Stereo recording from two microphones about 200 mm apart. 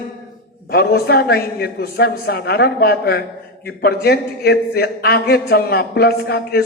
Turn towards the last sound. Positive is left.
turn(degrees=55)  # may be behind; listen again after turning